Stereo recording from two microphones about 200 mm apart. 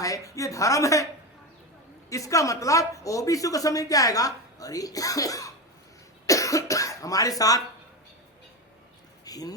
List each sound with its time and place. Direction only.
0.0 s speech: 15° left (ahead or behind)
2.0 s speech: 15° left (ahead or behind)
9.2 s speech: 20° left (ahead or behind)